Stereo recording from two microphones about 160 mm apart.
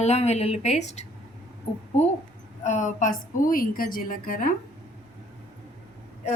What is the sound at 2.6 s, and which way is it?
A woman's voice, 50° left (ahead or behind).